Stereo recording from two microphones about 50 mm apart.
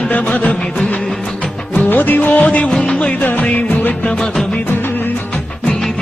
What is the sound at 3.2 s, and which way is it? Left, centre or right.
Music, left.